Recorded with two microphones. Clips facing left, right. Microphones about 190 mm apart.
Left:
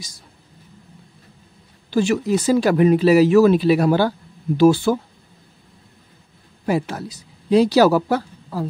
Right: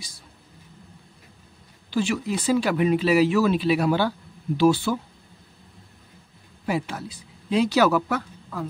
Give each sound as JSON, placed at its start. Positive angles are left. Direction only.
{"t": 1.9, "sound": "speech", "side_deg": 45}
{"t": 6.6, "sound": "speech", "side_deg": 40}